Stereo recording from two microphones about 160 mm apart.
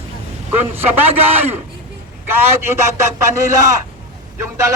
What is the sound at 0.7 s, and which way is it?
Speech, 10° right (ahead or behind).